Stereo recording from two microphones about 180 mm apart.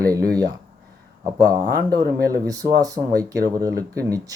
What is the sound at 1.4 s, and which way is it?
Speech, 20° right (ahead or behind).